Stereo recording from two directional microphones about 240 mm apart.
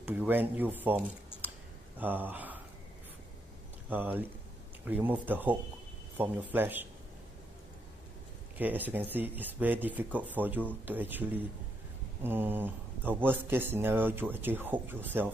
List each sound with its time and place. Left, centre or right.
0.0 s speech: centre
3.9 s speech: centre
8.5 s speech: centre